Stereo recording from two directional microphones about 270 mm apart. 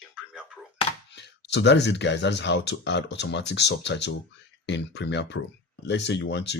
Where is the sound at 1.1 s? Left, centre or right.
Left.